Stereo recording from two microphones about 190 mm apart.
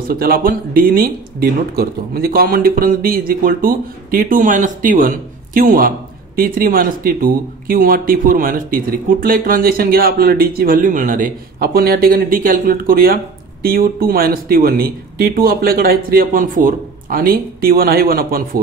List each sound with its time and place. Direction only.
0.1 s speech: 50° right (ahead or behind)